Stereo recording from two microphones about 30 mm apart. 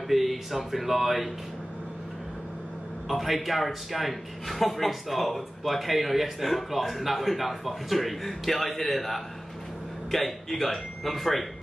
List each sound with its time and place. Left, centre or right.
0.1 s a man's voice: centre
3.1 s a man's voice: centre